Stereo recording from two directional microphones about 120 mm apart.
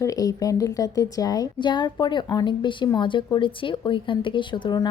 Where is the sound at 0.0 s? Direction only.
30° left (ahead or behind).